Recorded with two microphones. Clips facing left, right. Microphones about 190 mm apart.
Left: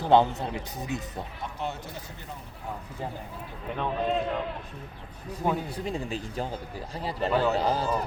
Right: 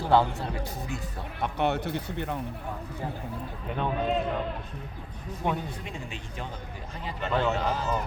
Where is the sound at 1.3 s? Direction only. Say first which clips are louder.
Right 10 dB; 65° right (ahead or behind).